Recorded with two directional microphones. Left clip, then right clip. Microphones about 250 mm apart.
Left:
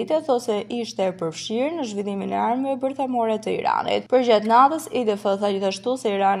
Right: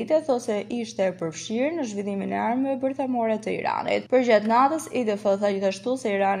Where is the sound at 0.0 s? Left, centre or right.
Left.